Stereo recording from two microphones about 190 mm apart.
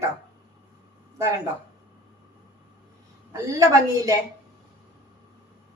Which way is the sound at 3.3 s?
20° right (ahead or behind).